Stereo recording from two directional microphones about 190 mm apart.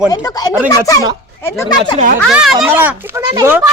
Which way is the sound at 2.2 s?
Centre (ahead or behind).